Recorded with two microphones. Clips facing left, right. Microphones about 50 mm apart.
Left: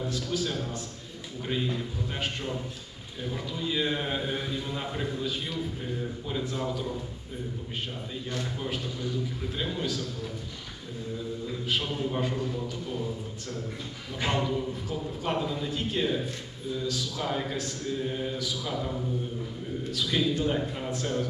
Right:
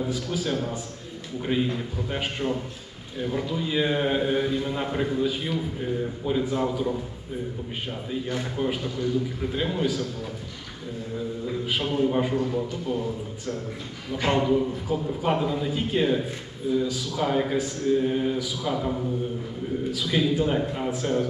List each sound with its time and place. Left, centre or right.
0.0 s a man's voice: centre
8.1 s a man's voice: centre
11.4 s a man's voice: centre
14.3 s a man's voice: centre